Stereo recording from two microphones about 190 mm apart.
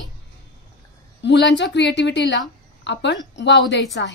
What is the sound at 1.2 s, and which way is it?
A woman's voice, 65° left (ahead or behind).